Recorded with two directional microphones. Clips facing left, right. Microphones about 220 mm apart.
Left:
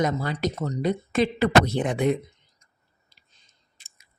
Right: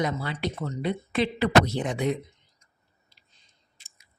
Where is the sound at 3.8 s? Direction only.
55° left (ahead or behind).